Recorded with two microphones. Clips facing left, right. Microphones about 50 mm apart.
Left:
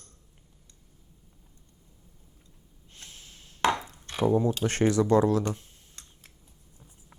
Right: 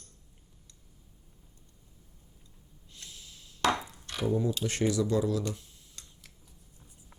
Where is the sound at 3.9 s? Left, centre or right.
Left.